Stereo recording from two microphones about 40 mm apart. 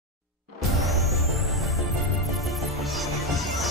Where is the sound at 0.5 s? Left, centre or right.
Centre.